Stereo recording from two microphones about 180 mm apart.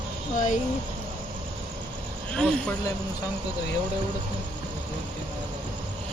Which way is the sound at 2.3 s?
5° left (ahead or behind).